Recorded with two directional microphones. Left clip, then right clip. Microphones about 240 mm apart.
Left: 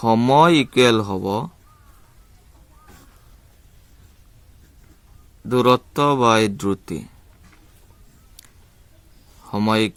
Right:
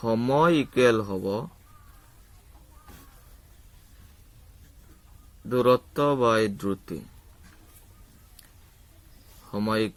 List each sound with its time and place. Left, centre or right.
0.0 s speech: left
5.5 s speech: left
9.5 s speech: left